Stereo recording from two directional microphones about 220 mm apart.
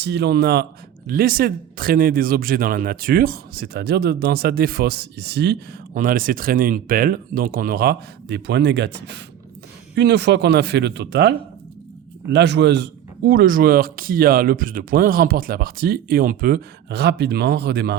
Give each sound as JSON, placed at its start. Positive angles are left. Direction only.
{"t": 0.0, "sound": "speech", "side_deg": -50}